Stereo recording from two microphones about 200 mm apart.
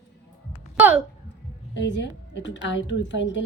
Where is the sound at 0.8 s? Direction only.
5° right (ahead or behind).